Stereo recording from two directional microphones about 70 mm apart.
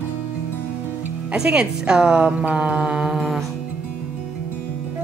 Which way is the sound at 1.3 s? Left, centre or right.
Centre.